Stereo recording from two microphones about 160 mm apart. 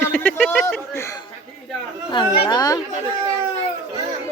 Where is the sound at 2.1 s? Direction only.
30° left (ahead or behind).